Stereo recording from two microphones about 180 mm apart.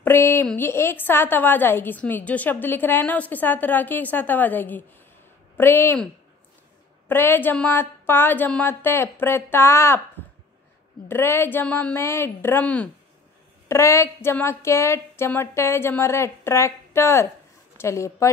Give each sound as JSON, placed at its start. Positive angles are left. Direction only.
{"t": 0.0, "sound": "a sound", "side_deg": 15}
{"t": 0.5, "sound": "a woman's voice", "side_deg": 10}
{"t": 7.1, "sound": "a woman's voice", "side_deg": 10}
{"t": 11.1, "sound": "a woman's voice", "side_deg": 15}